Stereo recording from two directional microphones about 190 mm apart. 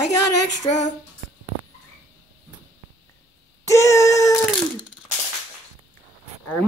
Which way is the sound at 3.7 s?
15° left (ahead or behind).